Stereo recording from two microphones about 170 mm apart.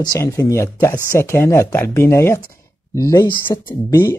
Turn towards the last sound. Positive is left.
turn(degrees=20)  # may be behind; listen again after turning